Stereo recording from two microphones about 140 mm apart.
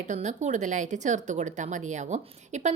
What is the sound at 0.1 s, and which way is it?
Speech, 60° right (ahead or behind).